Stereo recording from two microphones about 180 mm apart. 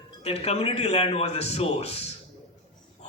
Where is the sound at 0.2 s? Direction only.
35° left (ahead or behind).